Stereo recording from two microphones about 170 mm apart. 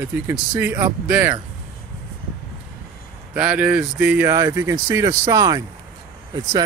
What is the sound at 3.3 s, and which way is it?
Speech, 10° right (ahead or behind).